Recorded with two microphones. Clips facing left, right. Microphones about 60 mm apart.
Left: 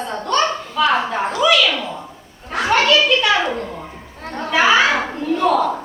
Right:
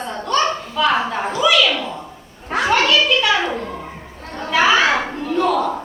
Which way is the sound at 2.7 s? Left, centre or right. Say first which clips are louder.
Left 2 dB; centre.